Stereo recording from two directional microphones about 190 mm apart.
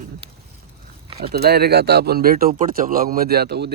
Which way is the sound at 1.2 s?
55° right (ahead or behind).